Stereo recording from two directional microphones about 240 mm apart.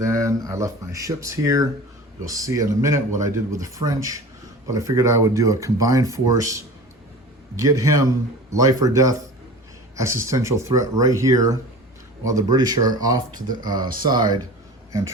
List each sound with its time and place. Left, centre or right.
0.0 s speech: centre